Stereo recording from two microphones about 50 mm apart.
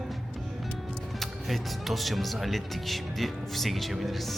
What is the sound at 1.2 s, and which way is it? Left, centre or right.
Speech, centre.